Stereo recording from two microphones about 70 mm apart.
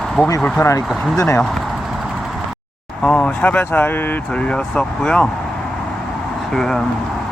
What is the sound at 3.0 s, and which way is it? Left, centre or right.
Speech, centre.